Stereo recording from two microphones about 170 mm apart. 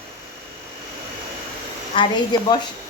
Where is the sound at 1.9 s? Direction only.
30° left (ahead or behind).